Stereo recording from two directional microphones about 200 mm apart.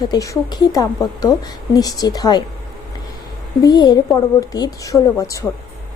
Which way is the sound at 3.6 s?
20° left (ahead or behind).